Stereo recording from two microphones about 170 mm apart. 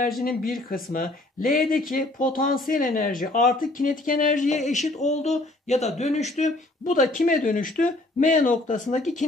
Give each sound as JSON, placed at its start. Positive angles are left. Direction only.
{"t": 0.2, "sound": "speech", "side_deg": 55}